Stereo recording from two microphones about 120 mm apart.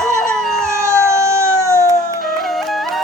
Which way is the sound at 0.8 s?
20° right (ahead or behind).